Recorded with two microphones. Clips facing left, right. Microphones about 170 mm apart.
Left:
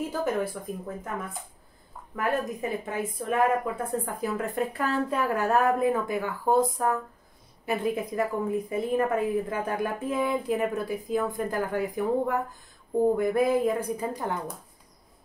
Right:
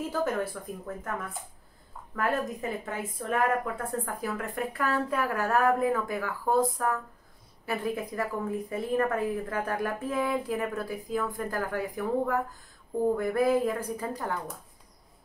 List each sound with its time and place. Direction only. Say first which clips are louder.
0.1 s speech: left 1 dB; 15° left (ahead or behind)
2.8 s a woman's voice: left 4 dB; 15° left (ahead or behind)